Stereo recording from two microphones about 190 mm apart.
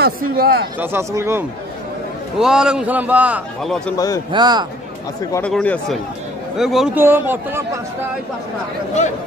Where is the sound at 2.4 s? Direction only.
5° right (ahead or behind).